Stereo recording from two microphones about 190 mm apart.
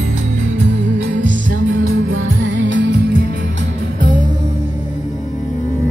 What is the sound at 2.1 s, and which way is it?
Music, 80° right.